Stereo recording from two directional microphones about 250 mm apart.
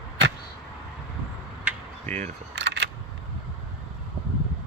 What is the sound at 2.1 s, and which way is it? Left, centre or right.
Speech, right.